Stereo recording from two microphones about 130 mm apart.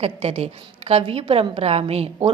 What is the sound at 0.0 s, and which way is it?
A woman's voice, 50° right (ahead or behind).